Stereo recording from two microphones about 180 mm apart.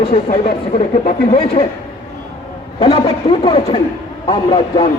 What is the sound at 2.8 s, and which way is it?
A man's voice, 30° left (ahead or behind).